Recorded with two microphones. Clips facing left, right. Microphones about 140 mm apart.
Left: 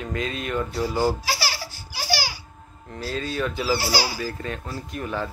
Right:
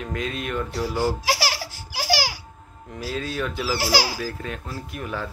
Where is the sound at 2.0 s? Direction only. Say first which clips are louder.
Right 3 dB; 90° right.